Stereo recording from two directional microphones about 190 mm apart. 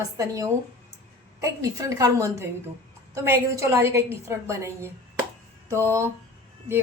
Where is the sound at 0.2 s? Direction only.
15° right (ahead or behind).